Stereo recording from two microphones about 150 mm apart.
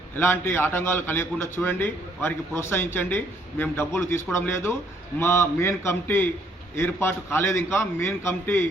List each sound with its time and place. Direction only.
0.2 s a man's voice: 15° left (ahead or behind)